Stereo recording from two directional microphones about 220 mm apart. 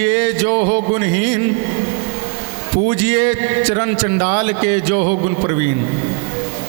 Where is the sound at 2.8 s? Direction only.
15° right (ahead or behind).